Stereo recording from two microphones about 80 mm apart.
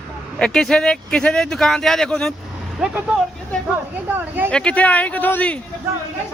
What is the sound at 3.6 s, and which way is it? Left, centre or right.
Speech, right.